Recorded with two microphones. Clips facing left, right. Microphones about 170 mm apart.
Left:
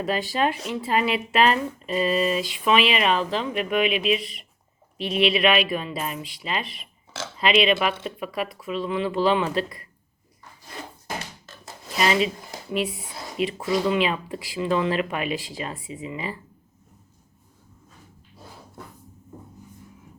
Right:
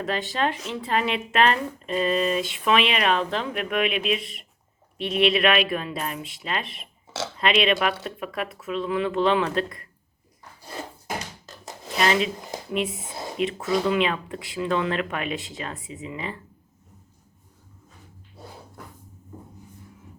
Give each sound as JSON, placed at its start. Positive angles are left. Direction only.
{"t": 0.0, "sound": "speech", "side_deg": 10}
{"t": 11.9, "sound": "speech", "side_deg": 5}
{"t": 13.4, "sound": "speech", "side_deg": 0}